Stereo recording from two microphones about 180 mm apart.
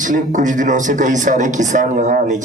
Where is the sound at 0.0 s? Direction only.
45° right (ahead or behind).